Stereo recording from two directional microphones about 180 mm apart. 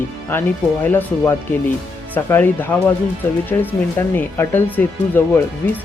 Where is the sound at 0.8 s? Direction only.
10° left (ahead or behind).